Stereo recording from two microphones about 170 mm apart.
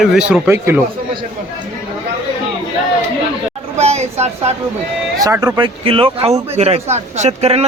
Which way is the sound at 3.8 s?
40° right (ahead or behind).